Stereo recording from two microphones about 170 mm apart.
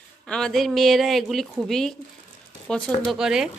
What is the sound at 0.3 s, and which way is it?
A woman's voice, centre (ahead or behind).